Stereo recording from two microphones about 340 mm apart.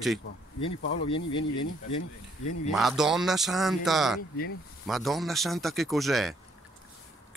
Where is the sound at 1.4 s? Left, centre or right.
Left.